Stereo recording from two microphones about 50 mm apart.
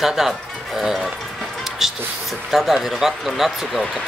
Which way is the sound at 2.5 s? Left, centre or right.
Centre.